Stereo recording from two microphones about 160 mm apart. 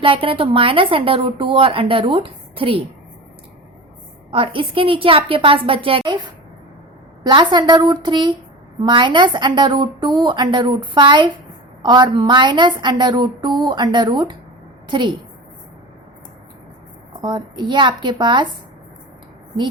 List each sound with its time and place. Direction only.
0.0 s a woman's voice: 35° right (ahead or behind)
4.3 s a woman's voice: 30° right (ahead or behind)
7.3 s a woman's voice: 30° right (ahead or behind)
17.2 s a woman's voice: 25° right (ahead or behind)